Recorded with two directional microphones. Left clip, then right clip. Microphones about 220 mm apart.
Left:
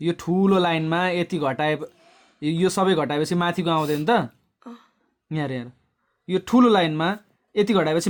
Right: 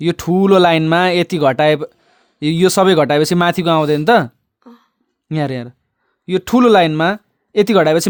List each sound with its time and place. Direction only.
0.0 s speech: 45° right (ahead or behind)
4.6 s a sound: 10° left (ahead or behind)
5.3 s speech: 45° right (ahead or behind)